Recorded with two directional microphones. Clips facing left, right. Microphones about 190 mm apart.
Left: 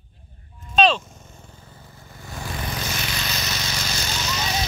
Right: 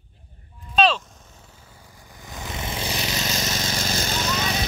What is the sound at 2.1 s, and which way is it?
Vehicle, 15° right (ahead or behind).